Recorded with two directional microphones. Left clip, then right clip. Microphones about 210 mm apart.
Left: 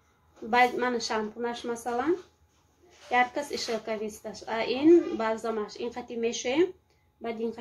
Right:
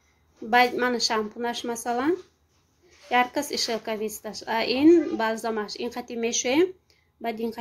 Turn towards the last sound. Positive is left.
turn(degrees=-45)  # may be behind; listen again after turning